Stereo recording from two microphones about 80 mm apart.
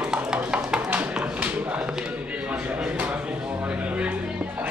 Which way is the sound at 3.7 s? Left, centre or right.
Centre.